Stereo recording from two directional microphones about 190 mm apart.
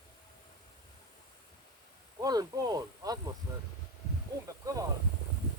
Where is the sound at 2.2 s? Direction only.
20° right (ahead or behind).